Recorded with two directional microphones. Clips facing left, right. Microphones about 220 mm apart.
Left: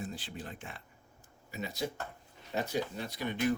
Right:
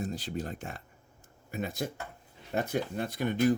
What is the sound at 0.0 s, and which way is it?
Speech, 40° right (ahead or behind).